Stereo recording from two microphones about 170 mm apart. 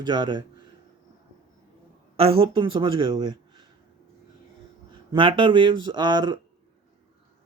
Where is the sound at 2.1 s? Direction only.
35° right (ahead or behind).